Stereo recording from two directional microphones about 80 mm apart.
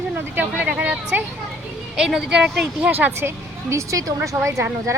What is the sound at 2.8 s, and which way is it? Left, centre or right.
Speech, right.